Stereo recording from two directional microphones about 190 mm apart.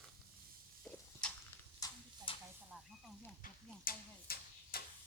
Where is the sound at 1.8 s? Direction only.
25° left (ahead or behind).